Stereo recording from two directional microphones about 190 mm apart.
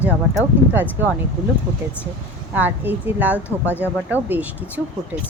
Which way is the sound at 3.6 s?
10° left (ahead or behind).